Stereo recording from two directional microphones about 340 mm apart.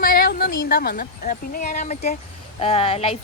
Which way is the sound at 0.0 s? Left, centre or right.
Left.